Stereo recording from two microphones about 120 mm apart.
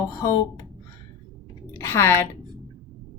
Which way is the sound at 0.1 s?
30° left (ahead or behind).